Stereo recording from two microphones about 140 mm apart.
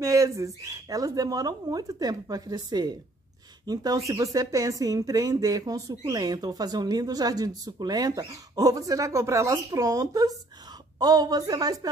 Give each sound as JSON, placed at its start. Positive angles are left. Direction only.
{"t": 0.0, "sound": "a woman's voice", "side_deg": -25}